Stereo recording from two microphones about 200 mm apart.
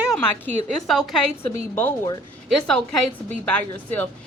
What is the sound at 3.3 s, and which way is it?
Speech, 5° left (ahead or behind).